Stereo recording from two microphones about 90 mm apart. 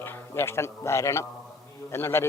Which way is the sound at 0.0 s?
25° left (ahead or behind).